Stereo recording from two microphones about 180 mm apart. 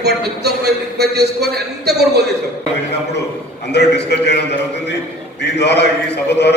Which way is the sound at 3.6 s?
70° left (ahead or behind).